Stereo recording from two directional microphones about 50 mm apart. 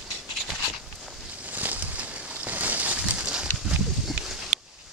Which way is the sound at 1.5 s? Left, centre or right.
Right.